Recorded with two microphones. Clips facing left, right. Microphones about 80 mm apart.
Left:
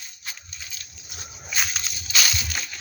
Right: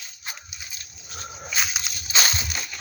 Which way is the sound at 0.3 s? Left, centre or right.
Right.